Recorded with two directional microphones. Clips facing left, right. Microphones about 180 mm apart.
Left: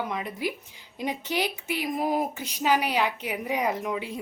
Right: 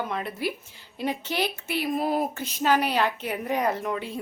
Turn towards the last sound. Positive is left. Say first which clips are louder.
# right 1 dB
turn(degrees=10)  # may be behind; listen again after turning